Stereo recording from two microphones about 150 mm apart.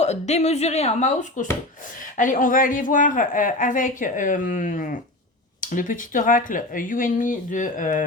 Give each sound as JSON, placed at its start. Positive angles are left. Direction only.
{"t": 0.0, "sound": "speech", "side_deg": 50}